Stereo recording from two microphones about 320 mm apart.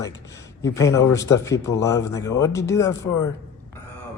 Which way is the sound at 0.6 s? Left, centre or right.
Centre.